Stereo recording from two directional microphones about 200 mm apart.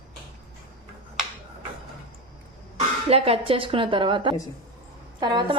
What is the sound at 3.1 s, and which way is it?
A woman's voice, 30° right (ahead or behind).